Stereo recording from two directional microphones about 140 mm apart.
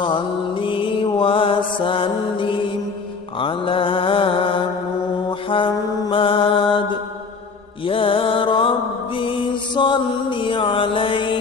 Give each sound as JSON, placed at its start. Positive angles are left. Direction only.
{"t": 0.0, "sound": "mantra", "side_deg": 35}
{"t": 7.8, "sound": "mantra", "side_deg": 40}